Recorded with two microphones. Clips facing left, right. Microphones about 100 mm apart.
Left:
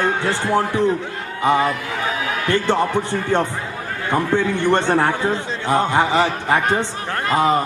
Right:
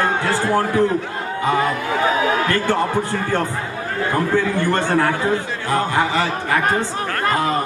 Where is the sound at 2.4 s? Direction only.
25° left (ahead or behind).